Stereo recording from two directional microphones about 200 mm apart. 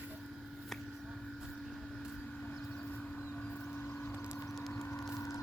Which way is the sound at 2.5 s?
5° left (ahead or behind).